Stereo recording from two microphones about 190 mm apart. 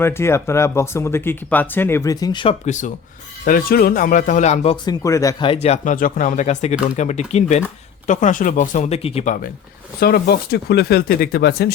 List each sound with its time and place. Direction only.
0.0 s speech: 15° left (ahead or behind)
2.6 s speech: 40° left (ahead or behind)
5.0 s speech: 15° left (ahead or behind)
5.6 s speech: 40° left (ahead or behind)
10.0 s speech: 55° left (ahead or behind)